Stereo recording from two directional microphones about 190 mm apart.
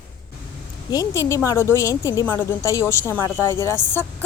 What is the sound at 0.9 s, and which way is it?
A woman's voice, 20° left (ahead or behind).